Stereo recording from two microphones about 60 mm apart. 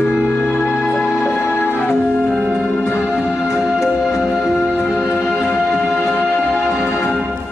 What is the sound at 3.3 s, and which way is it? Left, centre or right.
Music, left.